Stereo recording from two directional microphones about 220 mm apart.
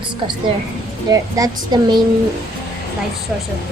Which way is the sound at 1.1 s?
15° right (ahead or behind).